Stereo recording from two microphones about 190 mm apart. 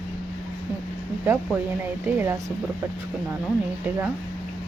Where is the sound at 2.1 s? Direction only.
15° right (ahead or behind).